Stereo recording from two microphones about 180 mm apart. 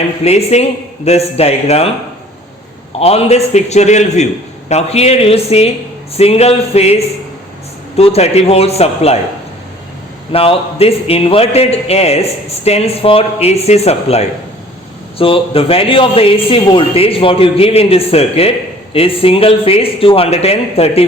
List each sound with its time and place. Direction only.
0.3 s a man's voice: 35° left (ahead or behind)
3.0 s a man's voice: 35° left (ahead or behind)
10.3 s a man's voice: 30° left (ahead or behind)